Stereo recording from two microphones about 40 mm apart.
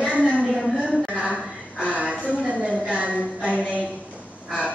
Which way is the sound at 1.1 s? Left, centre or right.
Right.